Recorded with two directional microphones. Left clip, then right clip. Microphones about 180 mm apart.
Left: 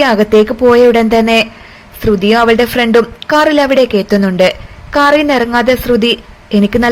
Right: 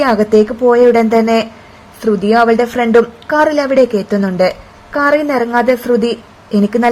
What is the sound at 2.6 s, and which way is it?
Speech, 25° left (ahead or behind).